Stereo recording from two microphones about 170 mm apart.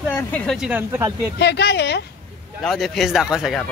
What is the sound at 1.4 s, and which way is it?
Speech, 75° left (ahead or behind).